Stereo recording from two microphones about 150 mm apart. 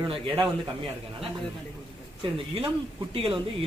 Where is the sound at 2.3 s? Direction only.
35° right (ahead or behind).